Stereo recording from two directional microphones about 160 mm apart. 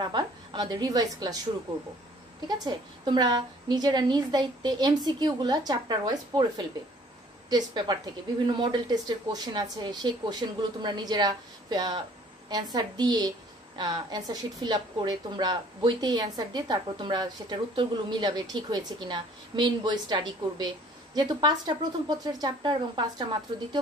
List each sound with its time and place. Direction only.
0.0 s a woman's voice: 30° right (ahead or behind)
2.4 s a woman's voice: 25° right (ahead or behind)